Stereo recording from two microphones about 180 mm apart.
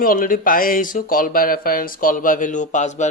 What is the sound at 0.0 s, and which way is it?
Speech, 50° left (ahead or behind).